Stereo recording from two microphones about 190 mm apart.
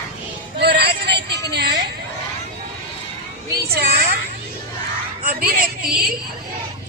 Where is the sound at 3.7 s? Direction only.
55° right (ahead or behind).